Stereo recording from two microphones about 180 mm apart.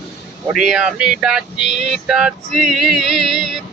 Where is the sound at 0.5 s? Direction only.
5° right (ahead or behind).